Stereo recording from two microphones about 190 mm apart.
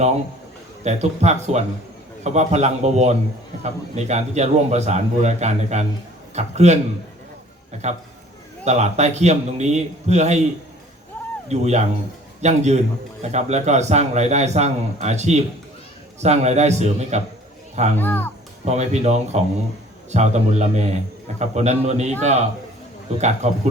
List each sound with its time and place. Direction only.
0.9 s a man's voice: 35° right (ahead or behind)
11.4 s a man's voice: 35° right (ahead or behind)
17.9 s a child's voice: 10° left (ahead or behind)
18.6 s a man's voice: 35° right (ahead or behind)